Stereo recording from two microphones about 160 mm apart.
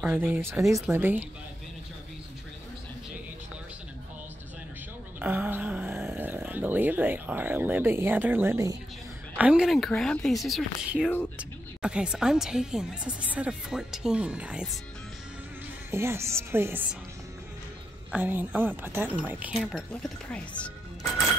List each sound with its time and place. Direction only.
0.0 s speech: 10° right (ahead or behind)
5.2 s speech: 10° right (ahead or behind)
9.4 s speech: 5° right (ahead or behind)
15.9 s speech: 15° right (ahead or behind)
18.1 s speech: 10° right (ahead or behind)
19.9 s speech: 5° left (ahead or behind)